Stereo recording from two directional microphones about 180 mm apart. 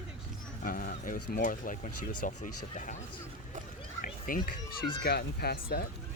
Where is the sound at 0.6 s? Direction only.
50° left (ahead or behind).